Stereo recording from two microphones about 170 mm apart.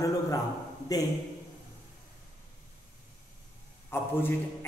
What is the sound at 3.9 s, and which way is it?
Speech, 10° left (ahead or behind).